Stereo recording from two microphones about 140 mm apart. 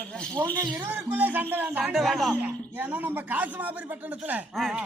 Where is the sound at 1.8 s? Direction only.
Centre (ahead or behind).